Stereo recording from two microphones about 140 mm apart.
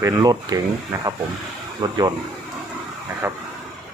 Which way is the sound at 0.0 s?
25° right (ahead or behind).